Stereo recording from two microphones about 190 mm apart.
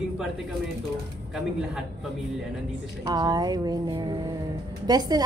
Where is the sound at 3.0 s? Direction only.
20° right (ahead or behind).